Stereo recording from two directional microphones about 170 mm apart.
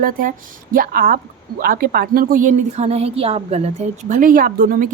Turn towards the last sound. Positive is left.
turn(degrees=-55)  # may be behind; listen again after turning